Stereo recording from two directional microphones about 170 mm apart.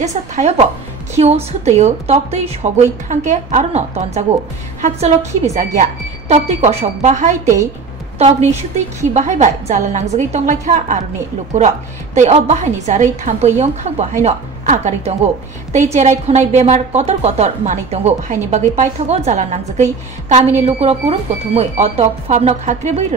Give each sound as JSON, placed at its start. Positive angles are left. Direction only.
{"t": 0.0, "sound": "a woman's voice", "side_deg": -45}